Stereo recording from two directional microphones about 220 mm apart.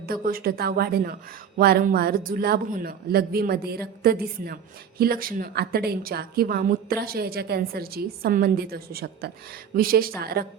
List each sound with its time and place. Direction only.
0.0 s a woman's voice: 40° right (ahead or behind)